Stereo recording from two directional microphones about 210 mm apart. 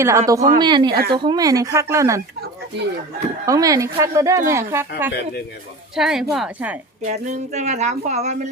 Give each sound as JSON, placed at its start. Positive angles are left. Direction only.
{"t": 0.0, "sound": "a woman's voice", "side_deg": -15}
{"t": 3.4, "sound": "a woman's voice", "side_deg": -15}
{"t": 7.0, "sound": "speech", "side_deg": -35}